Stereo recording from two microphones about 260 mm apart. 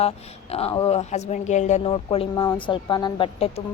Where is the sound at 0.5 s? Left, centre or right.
Left.